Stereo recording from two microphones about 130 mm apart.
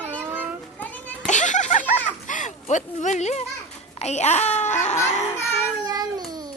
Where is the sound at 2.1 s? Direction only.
75° left (ahead or behind).